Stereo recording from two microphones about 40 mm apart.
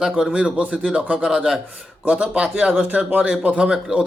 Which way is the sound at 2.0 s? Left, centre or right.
Right.